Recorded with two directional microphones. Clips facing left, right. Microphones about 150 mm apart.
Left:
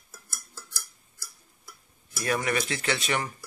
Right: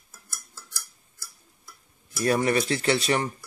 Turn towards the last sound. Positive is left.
turn(degrees=-35)  # may be behind; listen again after turning